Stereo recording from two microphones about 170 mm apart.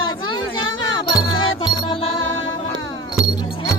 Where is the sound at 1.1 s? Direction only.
25° left (ahead or behind).